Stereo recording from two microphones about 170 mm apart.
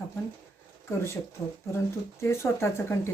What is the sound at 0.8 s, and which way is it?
Speech, 15° left (ahead or behind).